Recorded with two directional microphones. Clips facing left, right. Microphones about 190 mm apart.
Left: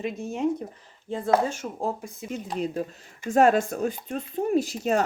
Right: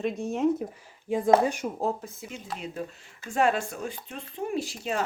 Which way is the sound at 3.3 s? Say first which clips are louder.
Left 6 dB; 45° left (ahead or behind).